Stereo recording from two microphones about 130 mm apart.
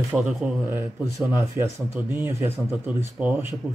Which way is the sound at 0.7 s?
25° right (ahead or behind).